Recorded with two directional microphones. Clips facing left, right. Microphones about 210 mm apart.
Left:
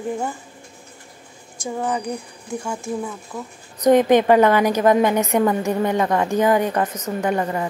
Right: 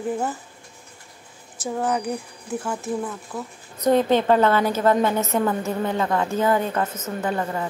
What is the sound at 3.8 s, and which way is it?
A woman's voice, 15° left (ahead or behind).